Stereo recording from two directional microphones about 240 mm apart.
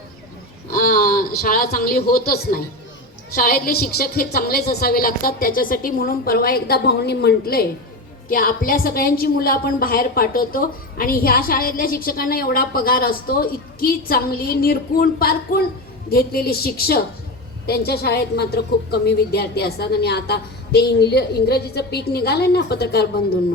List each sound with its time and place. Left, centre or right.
0.7 s a man's voice: left